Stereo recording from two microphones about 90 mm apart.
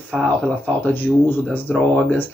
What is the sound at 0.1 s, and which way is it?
Speech, 15° left (ahead or behind).